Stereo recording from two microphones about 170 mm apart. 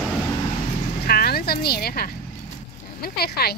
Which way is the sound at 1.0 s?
65° left (ahead or behind).